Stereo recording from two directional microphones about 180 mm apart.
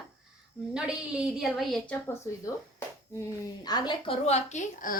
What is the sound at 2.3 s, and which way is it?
Speech, 20° left (ahead or behind).